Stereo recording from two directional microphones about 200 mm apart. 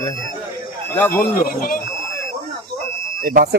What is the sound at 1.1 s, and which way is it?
Speech, 45° left (ahead or behind).